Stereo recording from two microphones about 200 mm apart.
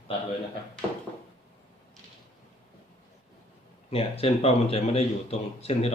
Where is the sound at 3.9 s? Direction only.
30° left (ahead or behind).